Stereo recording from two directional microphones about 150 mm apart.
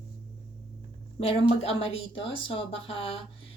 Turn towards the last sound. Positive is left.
turn(degrees=35)  # may be behind; listen again after turning